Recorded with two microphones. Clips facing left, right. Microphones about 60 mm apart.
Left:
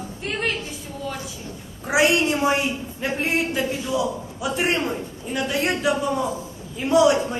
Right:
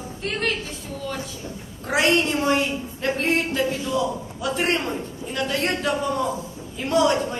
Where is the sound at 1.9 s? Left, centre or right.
Centre.